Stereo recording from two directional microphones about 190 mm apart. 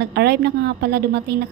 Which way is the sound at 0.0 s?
60° right (ahead or behind).